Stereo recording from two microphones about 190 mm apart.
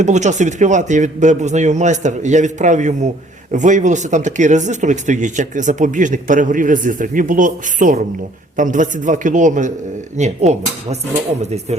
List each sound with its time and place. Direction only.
0.0 s speech: 40° right (ahead or behind)